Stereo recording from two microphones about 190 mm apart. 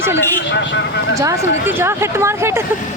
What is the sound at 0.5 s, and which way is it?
Speech, 65° left (ahead or behind).